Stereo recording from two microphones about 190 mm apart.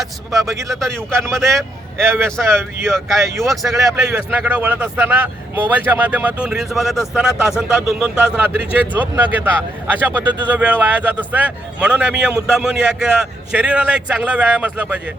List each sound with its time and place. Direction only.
0.0 s a man's voice: centre (ahead or behind)
2.0 s speech: 15° right (ahead or behind)
3.5 s a man's voice: centre (ahead or behind)